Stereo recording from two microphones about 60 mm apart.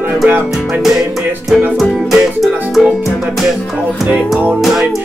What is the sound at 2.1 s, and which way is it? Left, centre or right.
Music, centre.